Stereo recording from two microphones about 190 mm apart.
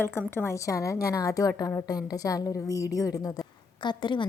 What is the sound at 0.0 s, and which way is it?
A woman's voice, 15° left (ahead or behind).